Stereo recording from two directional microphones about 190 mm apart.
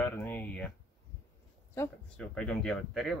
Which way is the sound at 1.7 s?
10° left (ahead or behind).